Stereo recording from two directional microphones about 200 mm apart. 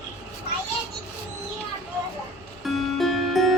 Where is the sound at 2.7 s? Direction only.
Centre (ahead or behind).